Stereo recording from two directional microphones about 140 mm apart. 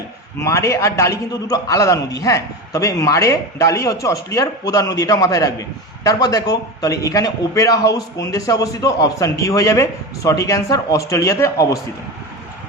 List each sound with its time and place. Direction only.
0.3 s a man's voice: 20° left (ahead or behind)